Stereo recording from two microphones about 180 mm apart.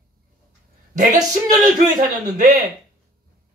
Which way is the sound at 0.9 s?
40° right (ahead or behind).